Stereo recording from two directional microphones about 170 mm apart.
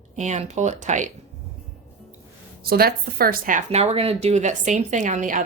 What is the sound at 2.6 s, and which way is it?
A woman's voice, 65° right (ahead or behind).